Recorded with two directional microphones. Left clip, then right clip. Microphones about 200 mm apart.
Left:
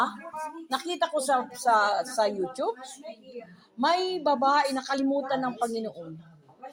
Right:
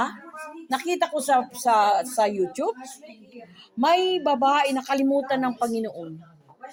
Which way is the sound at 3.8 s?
40° right (ahead or behind).